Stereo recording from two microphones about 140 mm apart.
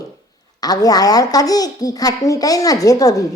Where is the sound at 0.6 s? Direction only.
25° left (ahead or behind).